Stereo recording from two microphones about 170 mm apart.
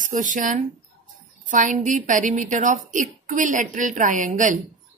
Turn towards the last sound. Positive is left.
turn(degrees=-50)  # may be behind; listen again after turning